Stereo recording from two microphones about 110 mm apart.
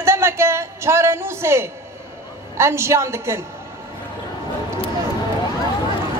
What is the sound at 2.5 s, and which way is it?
Speech, 25° right (ahead or behind).